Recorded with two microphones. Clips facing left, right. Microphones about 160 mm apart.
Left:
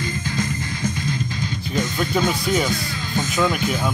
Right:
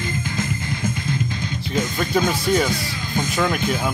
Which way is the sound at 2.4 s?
Centre (ahead or behind).